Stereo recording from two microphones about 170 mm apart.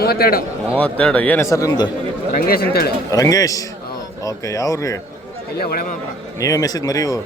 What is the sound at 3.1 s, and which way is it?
Speech, 20° left (ahead or behind).